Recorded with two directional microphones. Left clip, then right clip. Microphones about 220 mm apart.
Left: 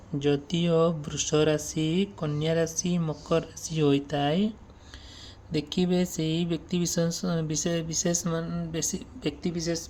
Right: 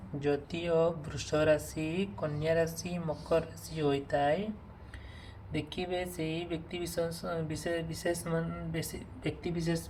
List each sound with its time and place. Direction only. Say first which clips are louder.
0.2 s speech: left 6 dB; 40° left (ahead or behind)
5.5 s speech: left 7 dB; 50° left (ahead or behind)